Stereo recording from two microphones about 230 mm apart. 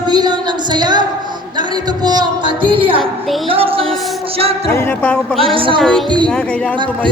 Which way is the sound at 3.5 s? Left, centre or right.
Right.